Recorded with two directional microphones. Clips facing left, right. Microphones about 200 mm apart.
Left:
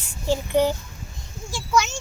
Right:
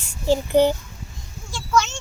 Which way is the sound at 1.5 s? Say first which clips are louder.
Right 1 dB; 10° left (ahead or behind).